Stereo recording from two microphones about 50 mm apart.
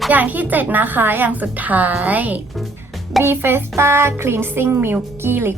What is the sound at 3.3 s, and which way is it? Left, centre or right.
A woman's voice, right.